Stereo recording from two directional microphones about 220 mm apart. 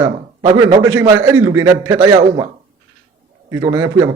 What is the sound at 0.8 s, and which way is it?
A man's voice, 10° right (ahead or behind).